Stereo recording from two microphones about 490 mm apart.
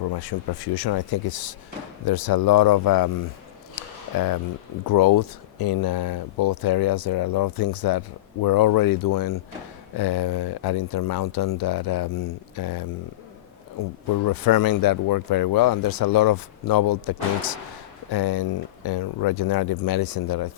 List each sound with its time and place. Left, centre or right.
0.1 s speech: left
4.9 s speech: left
10.0 s speech: left
14.3 s speech: left